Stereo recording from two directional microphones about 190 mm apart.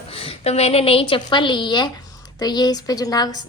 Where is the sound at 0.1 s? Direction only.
30° left (ahead or behind).